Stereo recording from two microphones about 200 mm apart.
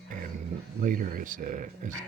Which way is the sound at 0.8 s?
45° right (ahead or behind).